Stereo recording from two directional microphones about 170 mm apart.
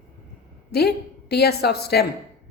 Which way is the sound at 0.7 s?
70° left (ahead or behind).